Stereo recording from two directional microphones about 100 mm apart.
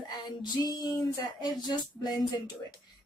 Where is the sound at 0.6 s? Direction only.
35° left (ahead or behind).